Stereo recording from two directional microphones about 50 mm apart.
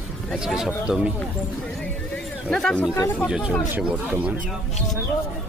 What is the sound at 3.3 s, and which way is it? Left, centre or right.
Speech, centre.